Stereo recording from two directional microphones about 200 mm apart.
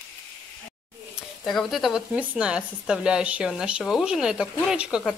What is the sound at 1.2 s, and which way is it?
Speech, centre (ahead or behind).